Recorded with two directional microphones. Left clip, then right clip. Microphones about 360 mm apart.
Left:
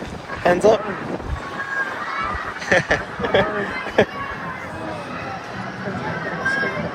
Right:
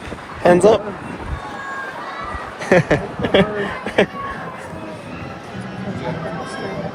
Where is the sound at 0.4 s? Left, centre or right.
Right.